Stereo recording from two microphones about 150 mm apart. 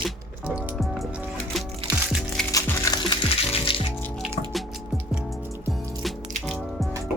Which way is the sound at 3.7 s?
35° left (ahead or behind).